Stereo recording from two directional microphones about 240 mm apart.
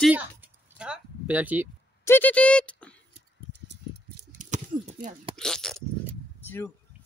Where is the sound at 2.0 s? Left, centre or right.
Centre.